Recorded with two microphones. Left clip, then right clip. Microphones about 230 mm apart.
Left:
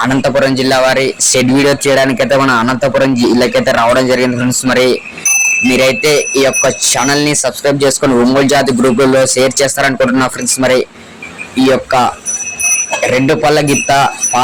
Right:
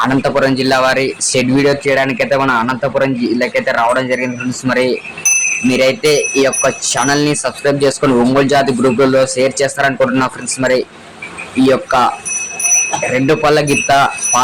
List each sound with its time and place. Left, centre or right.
0.0 s speech: centre
13.1 s speech: centre